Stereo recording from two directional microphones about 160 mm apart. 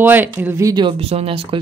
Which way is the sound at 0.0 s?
10° right (ahead or behind).